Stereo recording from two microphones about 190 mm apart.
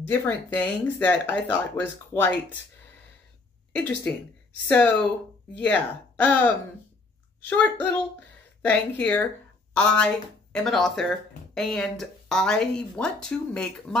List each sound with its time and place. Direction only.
0.1 s speech: 10° left (ahead or behind)
4.6 s speech: 5° left (ahead or behind)